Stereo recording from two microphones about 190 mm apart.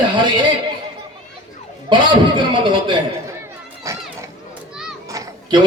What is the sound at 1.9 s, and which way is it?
A man's voice, 25° right (ahead or behind).